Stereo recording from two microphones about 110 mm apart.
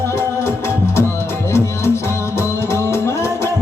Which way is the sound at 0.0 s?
25° left (ahead or behind).